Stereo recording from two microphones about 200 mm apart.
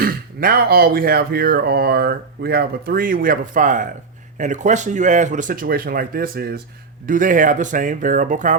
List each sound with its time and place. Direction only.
0.0 s speech: 50° right (ahead or behind)